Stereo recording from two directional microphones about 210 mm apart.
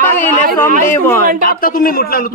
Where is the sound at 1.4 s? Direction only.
45° left (ahead or behind).